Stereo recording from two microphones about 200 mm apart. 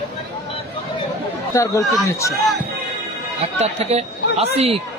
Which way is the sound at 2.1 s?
15° left (ahead or behind).